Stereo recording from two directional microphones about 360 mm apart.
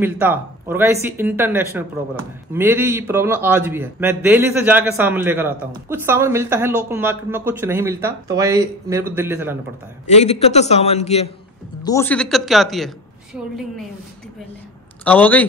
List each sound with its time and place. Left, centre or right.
0.0 s a woman's voice: centre
10.0 s a man's voice: centre
15.0 s a woman's voice: centre